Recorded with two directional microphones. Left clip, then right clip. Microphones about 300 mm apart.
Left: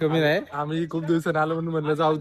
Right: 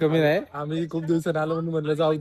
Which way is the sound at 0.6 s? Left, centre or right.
Centre.